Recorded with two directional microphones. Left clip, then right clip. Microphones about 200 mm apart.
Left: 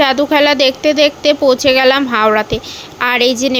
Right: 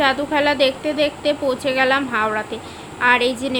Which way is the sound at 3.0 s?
45° left (ahead or behind).